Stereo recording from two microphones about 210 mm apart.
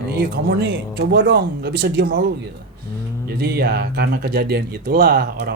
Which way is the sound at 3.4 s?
50° right (ahead or behind).